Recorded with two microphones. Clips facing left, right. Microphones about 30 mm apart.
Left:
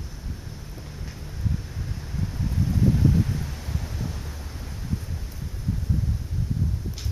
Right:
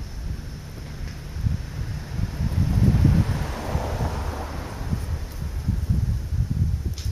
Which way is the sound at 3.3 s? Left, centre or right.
Right.